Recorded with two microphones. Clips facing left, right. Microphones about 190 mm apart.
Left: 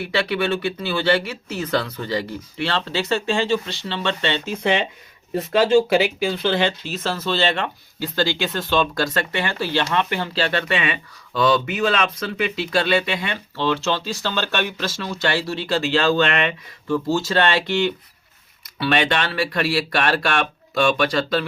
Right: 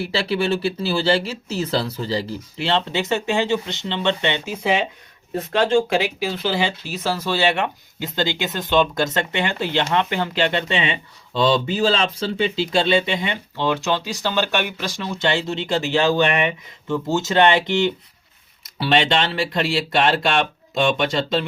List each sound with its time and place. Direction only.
0.0 s speech: 30° right (ahead or behind)